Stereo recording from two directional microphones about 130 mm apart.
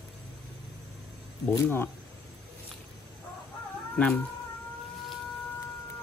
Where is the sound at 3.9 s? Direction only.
10° left (ahead or behind).